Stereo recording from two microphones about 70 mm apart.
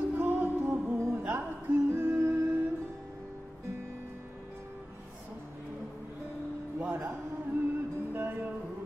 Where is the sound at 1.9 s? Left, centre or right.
Right.